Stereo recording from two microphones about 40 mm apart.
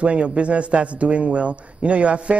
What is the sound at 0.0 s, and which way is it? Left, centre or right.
A man's voice, right.